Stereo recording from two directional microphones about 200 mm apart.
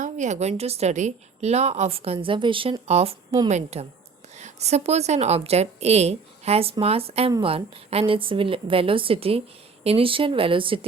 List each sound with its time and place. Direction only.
0.0 s a woman's voice: 35° right (ahead or behind)